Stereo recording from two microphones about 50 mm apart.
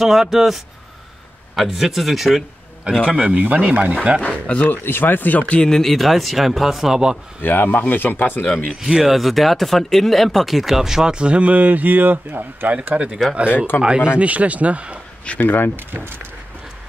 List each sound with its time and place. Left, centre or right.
0.0 s speech: centre
3.1 s speech: right
3.9 s speech: centre
4.5 s speech: left
4.8 s speech: left
5.6 s speech: centre
7.4 s speech: left
8.8 s speech: centre; by 12.7 s right
12.9 s speech: right
14.1 s speech: right
15.4 s speech: left
15.7 s speech: right